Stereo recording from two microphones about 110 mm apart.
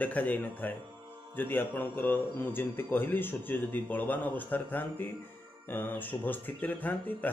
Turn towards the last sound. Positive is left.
turn(degrees=15)  # may be behind; listen again after turning